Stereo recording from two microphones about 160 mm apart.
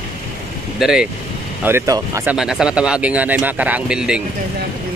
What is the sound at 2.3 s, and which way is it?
Speech, 5° right (ahead or behind).